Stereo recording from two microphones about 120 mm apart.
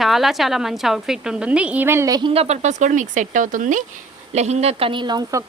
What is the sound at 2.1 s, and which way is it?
Speech, 35° right (ahead or behind).